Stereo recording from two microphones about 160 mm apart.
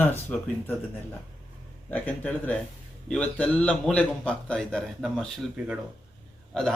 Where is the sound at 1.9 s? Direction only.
10° left (ahead or behind).